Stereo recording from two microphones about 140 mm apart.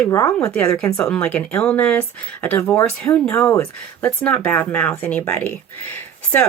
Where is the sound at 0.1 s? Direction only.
20° left (ahead or behind).